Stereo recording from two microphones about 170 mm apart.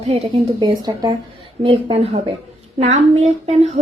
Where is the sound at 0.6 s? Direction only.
25° right (ahead or behind).